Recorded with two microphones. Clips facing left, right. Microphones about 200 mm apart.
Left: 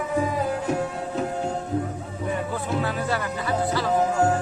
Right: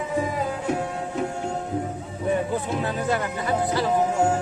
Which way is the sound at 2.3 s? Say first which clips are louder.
Right 3 dB; 20° right (ahead or behind).